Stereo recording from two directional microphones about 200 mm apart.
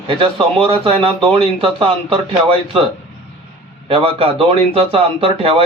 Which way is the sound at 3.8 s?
25° right (ahead or behind).